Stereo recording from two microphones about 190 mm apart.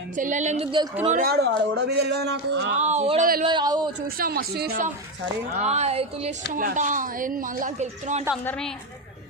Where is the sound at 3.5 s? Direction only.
25° right (ahead or behind).